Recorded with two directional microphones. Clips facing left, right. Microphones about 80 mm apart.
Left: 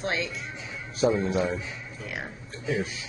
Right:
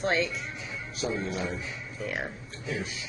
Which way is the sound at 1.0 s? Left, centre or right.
Left.